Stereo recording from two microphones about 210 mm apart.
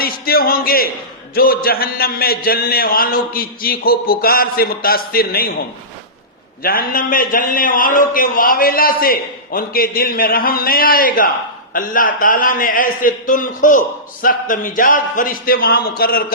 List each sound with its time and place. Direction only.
0.0 s a man's voice: 45° left (ahead or behind)